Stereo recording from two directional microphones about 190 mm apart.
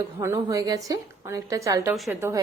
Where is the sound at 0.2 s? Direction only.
15° right (ahead or behind).